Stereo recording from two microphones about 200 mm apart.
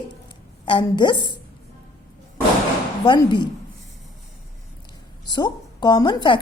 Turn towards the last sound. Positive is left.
turn(degrees=20)  # may be behind; listen again after turning